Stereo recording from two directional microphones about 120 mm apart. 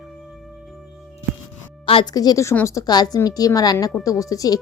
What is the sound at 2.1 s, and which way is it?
A woman's voice, 30° left (ahead or behind).